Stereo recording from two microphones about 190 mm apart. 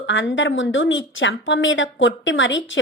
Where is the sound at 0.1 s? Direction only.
70° left (ahead or behind).